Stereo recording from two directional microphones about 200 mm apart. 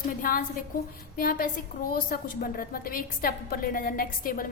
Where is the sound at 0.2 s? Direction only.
45° left (ahead or behind).